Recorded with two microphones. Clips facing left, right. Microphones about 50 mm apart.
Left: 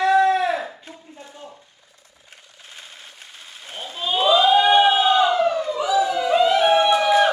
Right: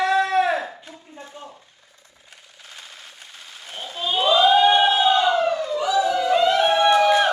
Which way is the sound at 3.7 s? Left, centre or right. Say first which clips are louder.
Even; left.